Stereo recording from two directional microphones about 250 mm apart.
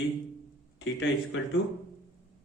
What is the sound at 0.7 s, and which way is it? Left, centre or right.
Speech, left.